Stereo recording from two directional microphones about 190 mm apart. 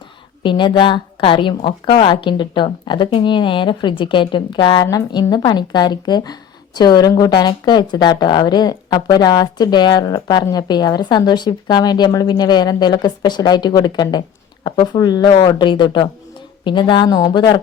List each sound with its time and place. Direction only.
0.4 s speech: 25° left (ahead or behind)